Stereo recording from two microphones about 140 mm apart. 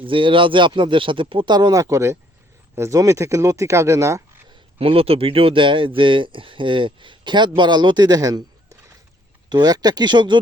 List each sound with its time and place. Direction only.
0.0 s speech: 40° right (ahead or behind); by 4.2 s 20° right (ahead or behind)
4.4 s speech: 40° right (ahead or behind)